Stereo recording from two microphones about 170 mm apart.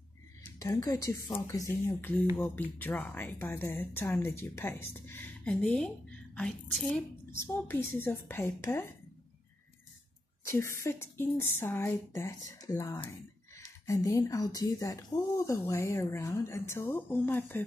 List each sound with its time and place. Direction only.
0.6 s a woman's voice: 20° left (ahead or behind)
7.2 s speech: 15° left (ahead or behind)
10.4 s speech: 15° left (ahead or behind)